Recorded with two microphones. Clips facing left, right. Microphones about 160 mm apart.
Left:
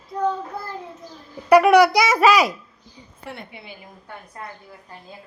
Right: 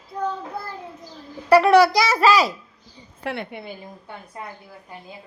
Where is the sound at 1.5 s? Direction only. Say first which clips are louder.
Left 1 dB; 15° left (ahead or behind).